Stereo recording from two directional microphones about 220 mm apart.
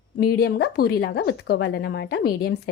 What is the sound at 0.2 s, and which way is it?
A woman's voice, 45° left (ahead or behind).